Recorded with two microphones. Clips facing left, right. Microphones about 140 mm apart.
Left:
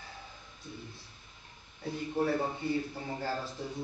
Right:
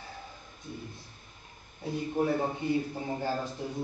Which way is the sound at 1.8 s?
15° right (ahead or behind).